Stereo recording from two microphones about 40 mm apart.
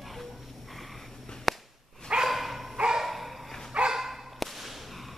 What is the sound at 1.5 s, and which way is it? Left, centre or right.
Whip, centre.